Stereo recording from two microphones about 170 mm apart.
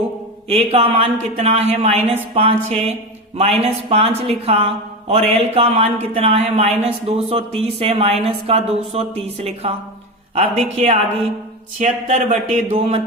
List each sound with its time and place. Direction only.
0.4 s speech: 35° right (ahead or behind)